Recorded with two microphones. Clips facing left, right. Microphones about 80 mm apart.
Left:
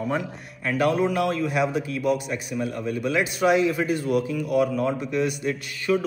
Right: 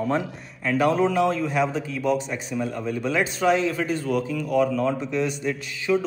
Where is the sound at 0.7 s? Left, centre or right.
Centre.